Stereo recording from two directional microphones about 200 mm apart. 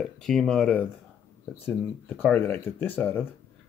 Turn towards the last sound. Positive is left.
turn(degrees=10)  # may be behind; listen again after turning